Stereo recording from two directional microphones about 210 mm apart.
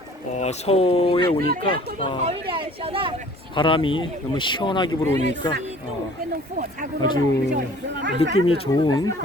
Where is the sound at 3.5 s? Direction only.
25° left (ahead or behind).